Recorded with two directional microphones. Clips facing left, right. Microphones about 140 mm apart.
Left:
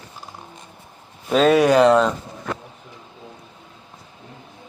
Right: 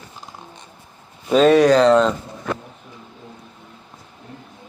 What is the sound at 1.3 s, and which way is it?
Speech, centre (ahead or behind).